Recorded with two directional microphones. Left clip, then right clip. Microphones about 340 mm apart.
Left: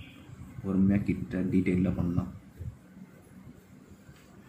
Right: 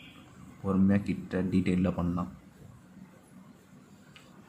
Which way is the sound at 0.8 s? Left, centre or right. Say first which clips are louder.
Even; centre.